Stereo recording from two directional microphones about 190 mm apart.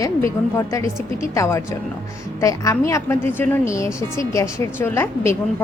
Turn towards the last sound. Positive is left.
turn(degrees=15)  # may be behind; listen again after turning